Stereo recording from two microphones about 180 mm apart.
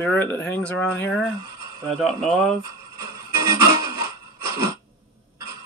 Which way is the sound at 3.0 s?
20° right (ahead or behind).